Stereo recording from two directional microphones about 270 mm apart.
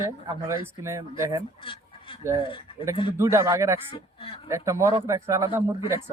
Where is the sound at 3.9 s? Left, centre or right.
Centre.